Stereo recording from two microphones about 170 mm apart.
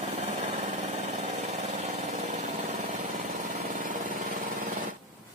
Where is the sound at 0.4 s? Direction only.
40° right (ahead or behind).